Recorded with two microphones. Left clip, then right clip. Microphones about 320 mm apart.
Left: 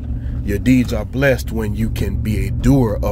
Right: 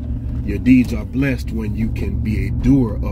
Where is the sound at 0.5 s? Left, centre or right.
Left.